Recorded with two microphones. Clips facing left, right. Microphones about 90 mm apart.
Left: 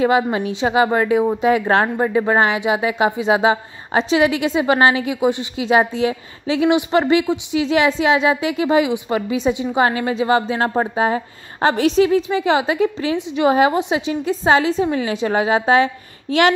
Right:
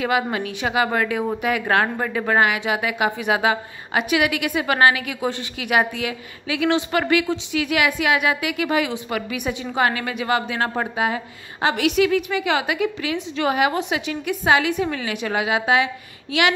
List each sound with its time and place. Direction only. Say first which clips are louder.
0.0 s a woman's voice: left 5 dB; 25° left (ahead or behind)